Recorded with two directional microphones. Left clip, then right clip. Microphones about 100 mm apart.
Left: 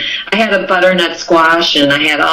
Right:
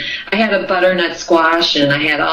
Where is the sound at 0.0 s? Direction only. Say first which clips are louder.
Left 3 dB; 25° left (ahead or behind).